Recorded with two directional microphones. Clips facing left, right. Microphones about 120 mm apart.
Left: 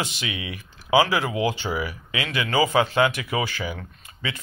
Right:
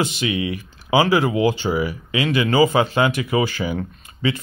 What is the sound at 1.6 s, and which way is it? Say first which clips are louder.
Speech: right 6 dB; 20° right (ahead or behind).